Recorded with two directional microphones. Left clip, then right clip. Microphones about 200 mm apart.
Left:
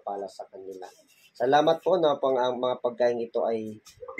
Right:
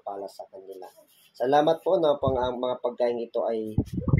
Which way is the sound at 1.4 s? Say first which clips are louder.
Even; 30° right (ahead or behind).